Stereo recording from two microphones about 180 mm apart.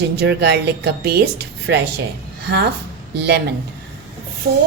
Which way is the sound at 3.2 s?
70° right (ahead or behind).